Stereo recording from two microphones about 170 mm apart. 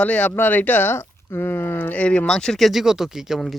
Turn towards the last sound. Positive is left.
turn(degrees=0)  # may be behind; listen again after turning